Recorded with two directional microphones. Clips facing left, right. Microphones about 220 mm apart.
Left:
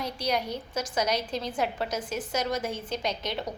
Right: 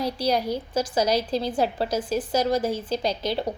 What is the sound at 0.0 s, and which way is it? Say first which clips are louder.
A woman's voice: right 6 dB; 30° right (ahead or behind).